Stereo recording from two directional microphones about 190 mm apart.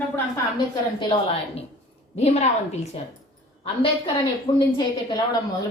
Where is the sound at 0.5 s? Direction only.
25° left (ahead or behind).